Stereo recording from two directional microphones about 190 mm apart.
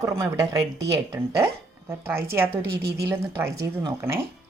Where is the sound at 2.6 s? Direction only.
55° right (ahead or behind).